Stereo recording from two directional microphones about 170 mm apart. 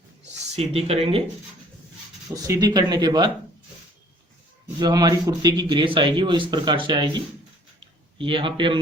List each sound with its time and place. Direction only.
0.5 s speech: 40° right (ahead or behind)
2.3 s speech: 20° right (ahead or behind)
4.8 s speech: 25° right (ahead or behind)
8.2 s speech: 30° right (ahead or behind)